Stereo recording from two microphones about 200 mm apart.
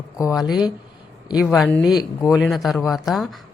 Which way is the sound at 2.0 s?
15° left (ahead or behind).